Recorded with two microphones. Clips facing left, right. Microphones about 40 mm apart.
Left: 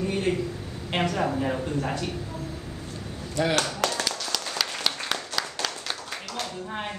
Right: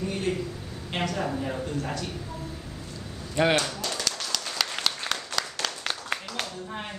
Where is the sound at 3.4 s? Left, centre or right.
Right.